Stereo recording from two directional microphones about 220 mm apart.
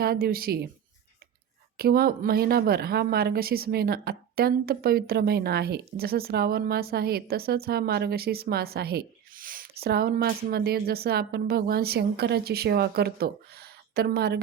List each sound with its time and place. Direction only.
0.0 s speech: 45° right (ahead or behind)
1.8 s speech: 45° right (ahead or behind)